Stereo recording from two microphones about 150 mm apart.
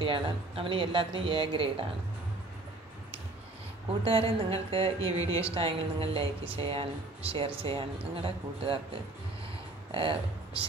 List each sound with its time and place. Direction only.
0.0 s speech: 35° right (ahead or behind)
4.0 s speech: 40° right (ahead or behind)
9.8 s speech: 35° right (ahead or behind)